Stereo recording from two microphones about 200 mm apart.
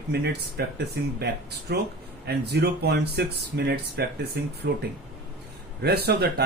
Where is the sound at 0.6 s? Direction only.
50° right (ahead or behind).